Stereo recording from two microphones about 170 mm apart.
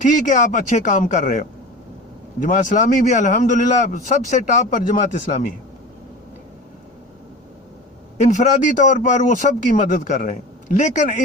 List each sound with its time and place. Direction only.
0.0 s a man's voice: 50° left (ahead or behind)
8.2 s a man's voice: 45° left (ahead or behind)